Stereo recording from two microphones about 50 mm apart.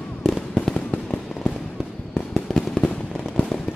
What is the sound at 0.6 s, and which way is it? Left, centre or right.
Fireworks, centre.